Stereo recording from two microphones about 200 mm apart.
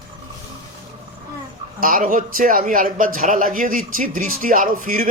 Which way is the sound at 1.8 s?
45° right (ahead or behind).